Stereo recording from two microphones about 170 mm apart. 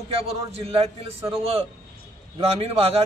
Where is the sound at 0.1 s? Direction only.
35° right (ahead or behind).